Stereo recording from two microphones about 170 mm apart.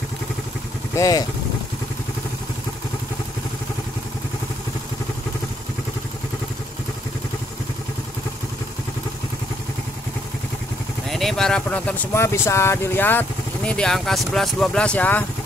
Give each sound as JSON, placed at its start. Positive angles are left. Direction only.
{"t": 0.9, "sound": "speech", "side_deg": 20}
{"t": 11.1, "sound": "speech", "side_deg": 0}